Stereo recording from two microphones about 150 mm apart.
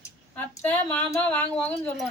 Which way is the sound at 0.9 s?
10° left (ahead or behind).